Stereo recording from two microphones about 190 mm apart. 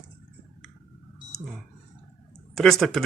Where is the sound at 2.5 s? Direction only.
Centre (ahead or behind).